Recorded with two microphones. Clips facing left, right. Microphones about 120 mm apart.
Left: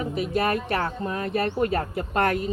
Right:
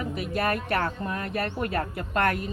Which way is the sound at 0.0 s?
25° left (ahead or behind).